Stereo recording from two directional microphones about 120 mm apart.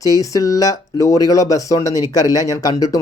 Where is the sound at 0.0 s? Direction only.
30° left (ahead or behind).